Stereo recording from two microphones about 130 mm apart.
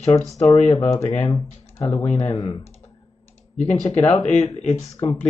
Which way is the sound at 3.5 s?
60° left (ahead or behind).